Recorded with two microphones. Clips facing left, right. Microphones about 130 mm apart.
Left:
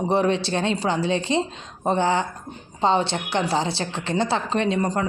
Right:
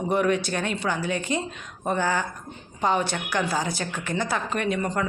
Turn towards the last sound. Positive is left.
turn(degrees=30)  # may be behind; listen again after turning